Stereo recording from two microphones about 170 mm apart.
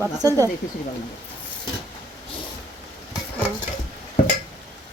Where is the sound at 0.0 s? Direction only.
20° right (ahead or behind).